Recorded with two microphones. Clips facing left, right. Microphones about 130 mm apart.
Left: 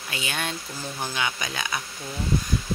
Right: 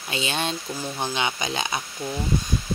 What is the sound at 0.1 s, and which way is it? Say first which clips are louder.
Speech: right 4 dB; 25° right (ahead or behind).